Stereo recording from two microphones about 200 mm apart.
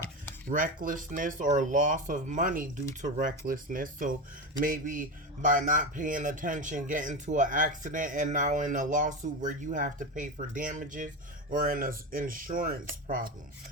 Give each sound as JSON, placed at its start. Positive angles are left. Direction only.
{"t": 0.5, "sound": "a man's voice", "side_deg": -40}